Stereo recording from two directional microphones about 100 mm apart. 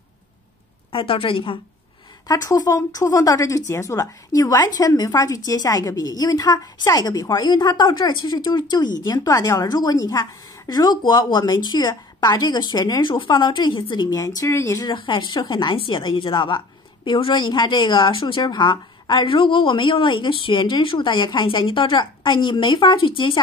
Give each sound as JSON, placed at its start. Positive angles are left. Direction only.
{"t": 0.9, "sound": "a woman's voice", "side_deg": 60}
{"t": 2.2, "sound": "a woman's voice", "side_deg": 40}
{"t": 14.2, "sound": "speech", "side_deg": 30}
{"t": 14.9, "sound": "a woman's voice", "side_deg": 50}